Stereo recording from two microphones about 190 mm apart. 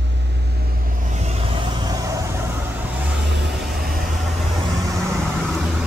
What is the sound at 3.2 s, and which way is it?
Vehicle, 65° right (ahead or behind).